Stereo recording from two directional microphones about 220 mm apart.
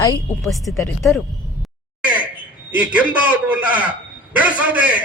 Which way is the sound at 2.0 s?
5° right (ahead or behind).